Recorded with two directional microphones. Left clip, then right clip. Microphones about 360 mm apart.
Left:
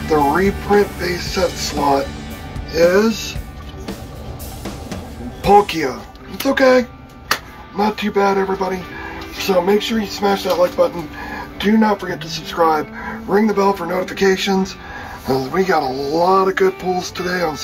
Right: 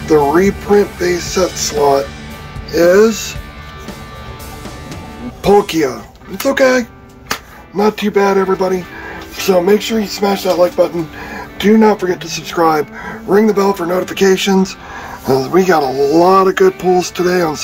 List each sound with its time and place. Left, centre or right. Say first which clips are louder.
0.1 s speech: right 4 dB; centre
2.7 s speech: right 5 dB; centre
5.7 s speech: right 5 dB; centre
11.5 s speech: right 6 dB; right